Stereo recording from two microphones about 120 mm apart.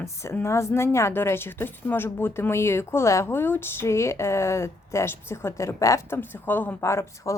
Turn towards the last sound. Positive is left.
turn(degrees=25)  # may be behind; listen again after turning